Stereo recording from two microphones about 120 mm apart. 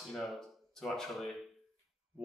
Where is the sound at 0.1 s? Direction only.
Centre (ahead or behind).